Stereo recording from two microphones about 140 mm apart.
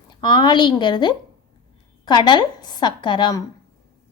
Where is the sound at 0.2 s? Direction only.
35° left (ahead or behind).